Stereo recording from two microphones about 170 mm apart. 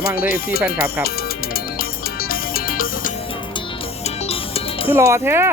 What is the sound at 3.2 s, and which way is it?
Music, 30° left (ahead or behind).